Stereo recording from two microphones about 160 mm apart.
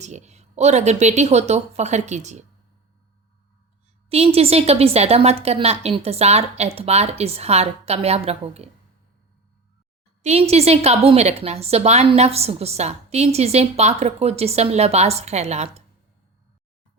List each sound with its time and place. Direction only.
0.0 s speech: 45° right (ahead or behind)
4.1 s a woman's voice: 40° right (ahead or behind)
10.2 s a woman's voice: 40° right (ahead or behind)